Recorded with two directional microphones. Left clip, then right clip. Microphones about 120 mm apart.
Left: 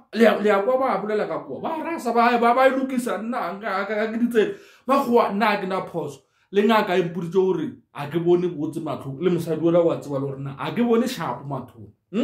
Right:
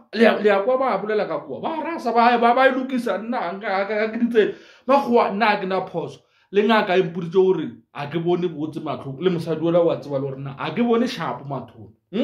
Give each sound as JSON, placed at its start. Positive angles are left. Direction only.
{"t": 0.1, "sound": "speech", "side_deg": 30}